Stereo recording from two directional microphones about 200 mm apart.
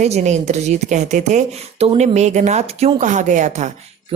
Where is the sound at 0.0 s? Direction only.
35° right (ahead or behind).